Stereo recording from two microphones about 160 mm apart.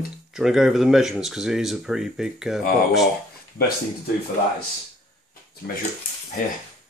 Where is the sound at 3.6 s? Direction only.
75° left (ahead or behind).